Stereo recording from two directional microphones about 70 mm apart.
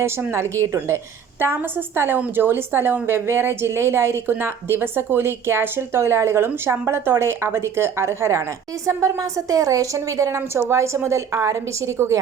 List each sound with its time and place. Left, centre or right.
0.0 s a woman's voice: right
2.0 s a woman's voice: right